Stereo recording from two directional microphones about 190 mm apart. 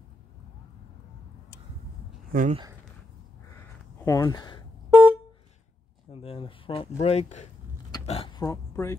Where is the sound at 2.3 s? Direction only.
45° right (ahead or behind).